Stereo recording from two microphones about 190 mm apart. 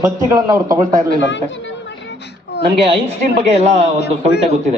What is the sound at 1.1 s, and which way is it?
Speech, 70° left (ahead or behind).